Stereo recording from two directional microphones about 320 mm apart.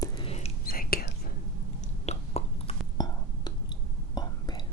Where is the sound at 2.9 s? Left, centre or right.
Centre.